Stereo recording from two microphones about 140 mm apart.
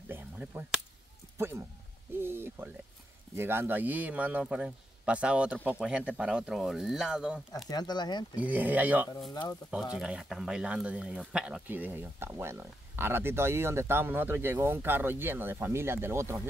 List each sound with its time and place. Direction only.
0.1 s finger snapping: 10° right (ahead or behind)
2.2 s a sound: 15° right (ahead or behind)
3.3 s speech: 15° right (ahead or behind)
7.7 s speech: 30° left (ahead or behind)
8.4 s speech: 10° right (ahead or behind)
9.3 s speech: 25° left (ahead or behind)
9.9 s speech: 5° right (ahead or behind)